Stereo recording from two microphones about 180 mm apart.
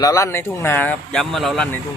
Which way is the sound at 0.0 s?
20° left (ahead or behind).